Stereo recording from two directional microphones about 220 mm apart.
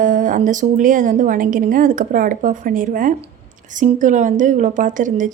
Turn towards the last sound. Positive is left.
turn(degrees=-35)  # may be behind; listen again after turning